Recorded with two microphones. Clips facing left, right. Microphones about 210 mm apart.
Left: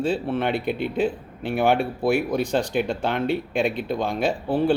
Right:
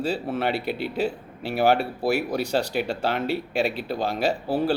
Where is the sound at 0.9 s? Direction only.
5° right (ahead or behind).